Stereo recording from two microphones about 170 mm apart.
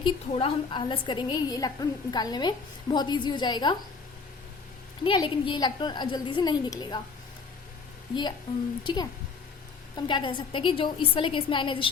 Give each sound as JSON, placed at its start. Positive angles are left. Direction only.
{"t": 0.0, "sound": "a woman's voice", "side_deg": 30}
{"t": 5.0, "sound": "a woman's voice", "side_deg": 30}
{"t": 8.8, "sound": "a woman's voice", "side_deg": 25}